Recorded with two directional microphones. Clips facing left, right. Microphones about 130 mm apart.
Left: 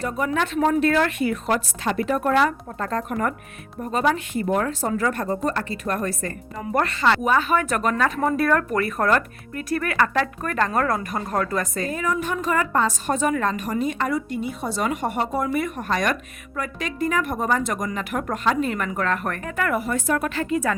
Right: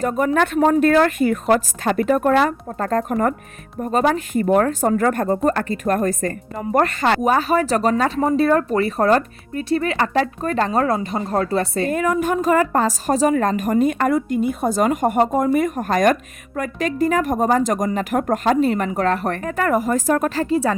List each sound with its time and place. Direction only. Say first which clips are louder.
0.0 s a woman's voice: right 6 dB; 45° right (ahead or behind); by 11.9 s 30° right (ahead or behind)
11.9 s a woman's voice: right 6 dB; 55° right (ahead or behind)
18.6 s speech: right 6 dB; 35° right (ahead or behind)